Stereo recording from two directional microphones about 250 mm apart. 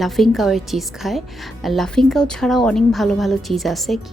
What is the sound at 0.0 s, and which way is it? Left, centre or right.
Speech, centre.